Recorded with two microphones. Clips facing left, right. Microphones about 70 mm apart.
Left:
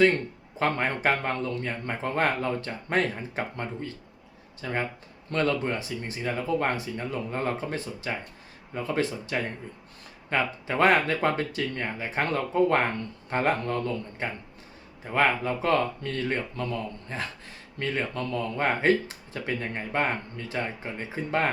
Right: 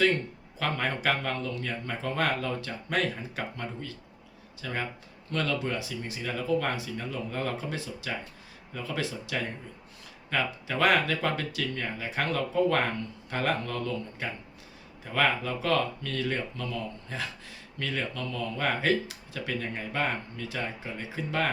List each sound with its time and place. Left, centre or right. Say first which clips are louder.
0.6 s speech: left 4 dB; left
17.7 s speech: left 3 dB; left